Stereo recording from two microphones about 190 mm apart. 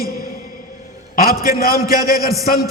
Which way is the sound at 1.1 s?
50° left (ahead or behind).